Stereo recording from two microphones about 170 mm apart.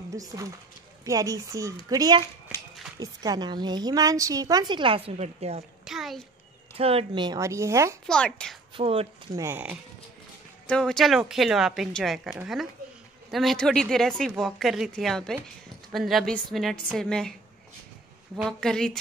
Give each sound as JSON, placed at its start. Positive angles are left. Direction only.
{"t": 0.1, "sound": "a woman's voice", "side_deg": -20}
{"t": 5.9, "sound": "a child's voice", "side_deg": 0}
{"t": 6.8, "sound": "speech", "side_deg": -35}
{"t": 8.1, "sound": "a woman's voice", "side_deg": 5}
{"t": 8.7, "sound": "speech", "side_deg": -35}
{"t": 9.3, "sound": "speech", "side_deg": -15}
{"t": 10.7, "sound": "a woman's voice", "side_deg": 5}